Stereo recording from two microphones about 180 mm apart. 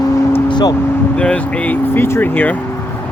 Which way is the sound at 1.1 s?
5° left (ahead or behind).